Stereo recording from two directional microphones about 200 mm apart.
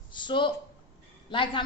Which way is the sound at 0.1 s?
25° left (ahead or behind).